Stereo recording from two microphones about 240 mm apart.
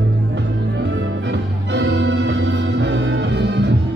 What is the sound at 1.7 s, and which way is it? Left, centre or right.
Music, right.